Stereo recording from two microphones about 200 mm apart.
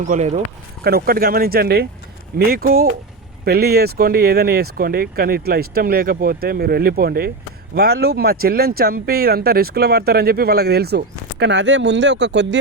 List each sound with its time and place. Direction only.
0.0 s speech: 35° right (ahead or behind)
0.9 s speech: 50° right (ahead or behind)